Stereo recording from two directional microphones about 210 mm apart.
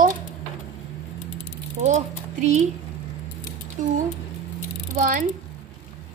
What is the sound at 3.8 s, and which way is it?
Speech, 35° right (ahead or behind).